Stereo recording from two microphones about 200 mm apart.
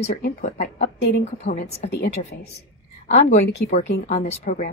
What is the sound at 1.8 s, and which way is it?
Speech, 35° left (ahead or behind).